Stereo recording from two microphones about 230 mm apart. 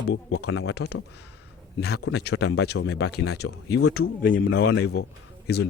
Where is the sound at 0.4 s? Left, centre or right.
Left.